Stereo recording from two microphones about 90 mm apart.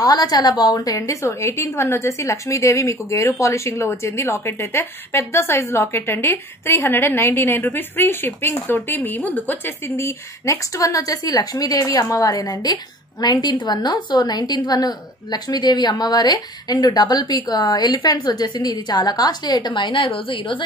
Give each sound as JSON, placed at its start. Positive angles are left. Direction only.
{"t": 0.0, "sound": "a woman's voice", "side_deg": 50}
{"t": 9.9, "sound": "a woman's voice", "side_deg": 35}